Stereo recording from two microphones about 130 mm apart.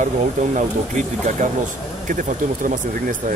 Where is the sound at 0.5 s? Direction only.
70° right (ahead or behind).